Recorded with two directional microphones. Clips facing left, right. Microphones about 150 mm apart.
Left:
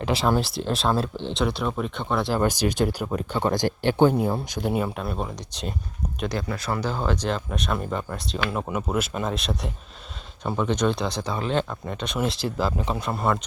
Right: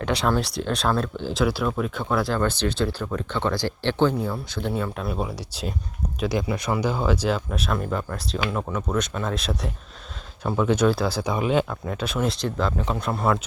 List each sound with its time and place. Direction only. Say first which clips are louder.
0.0 s speech: even; 5° left (ahead or behind)
0.9 s speech: even; 30° left (ahead or behind)
1.2 s speech: right 2 dB; centre (ahead or behind)
2.4 s speech: left 1 dB; 15° left (ahead or behind)
4.9 s speech: right 1 dB; centre (ahead or behind)